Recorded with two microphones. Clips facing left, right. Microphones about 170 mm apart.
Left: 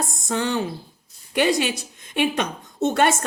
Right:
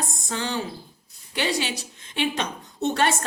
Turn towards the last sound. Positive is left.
turn(degrees=50)  # may be behind; listen again after turning